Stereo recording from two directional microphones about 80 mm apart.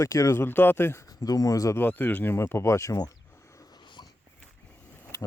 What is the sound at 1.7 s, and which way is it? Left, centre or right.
Speech, left.